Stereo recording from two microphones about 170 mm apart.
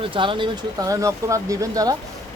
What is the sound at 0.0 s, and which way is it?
Speech, 30° right (ahead or behind).